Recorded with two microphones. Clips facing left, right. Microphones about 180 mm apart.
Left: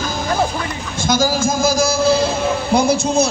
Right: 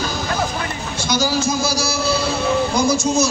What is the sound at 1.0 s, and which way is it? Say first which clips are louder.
A man's voice: left 3 dB; 50° left (ahead or behind).